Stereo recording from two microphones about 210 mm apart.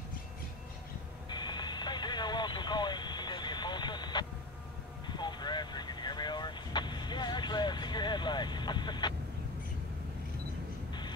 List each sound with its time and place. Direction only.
1.3 s radio: 20° left (ahead or behind)
5.0 s vehicle: 20° left (ahead or behind)
10.9 s vehicle: 20° left (ahead or behind)